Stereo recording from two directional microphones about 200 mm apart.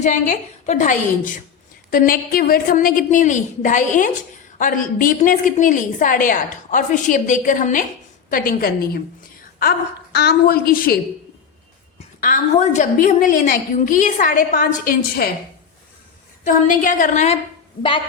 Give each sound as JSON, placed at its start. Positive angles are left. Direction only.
{"t": 0.0, "sound": "a woman's voice", "side_deg": 40}
{"t": 12.2, "sound": "a woman's voice", "side_deg": 40}
{"t": 16.4, "sound": "a woman's voice", "side_deg": 40}